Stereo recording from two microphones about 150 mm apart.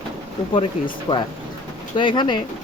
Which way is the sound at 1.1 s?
25° left (ahead or behind).